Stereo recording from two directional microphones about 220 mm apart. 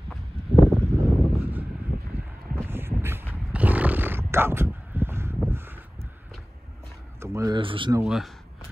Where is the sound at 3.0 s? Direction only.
10° right (ahead or behind).